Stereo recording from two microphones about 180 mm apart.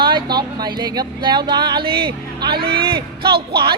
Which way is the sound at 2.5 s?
60° right (ahead or behind).